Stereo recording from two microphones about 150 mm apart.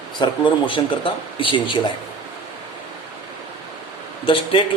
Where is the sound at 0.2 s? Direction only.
30° left (ahead or behind).